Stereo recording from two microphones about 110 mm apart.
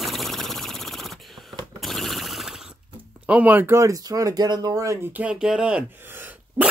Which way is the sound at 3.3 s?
15° right (ahead or behind).